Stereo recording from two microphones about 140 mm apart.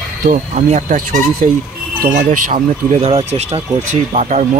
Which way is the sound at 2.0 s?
80° right.